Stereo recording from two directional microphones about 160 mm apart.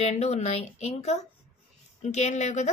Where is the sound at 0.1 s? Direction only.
40° left (ahead or behind).